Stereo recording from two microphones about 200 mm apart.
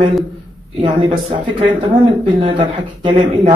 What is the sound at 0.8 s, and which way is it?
Speech, 25° right (ahead or behind).